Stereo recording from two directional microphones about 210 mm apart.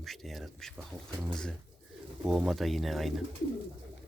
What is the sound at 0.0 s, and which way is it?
Speech, centre (ahead or behind).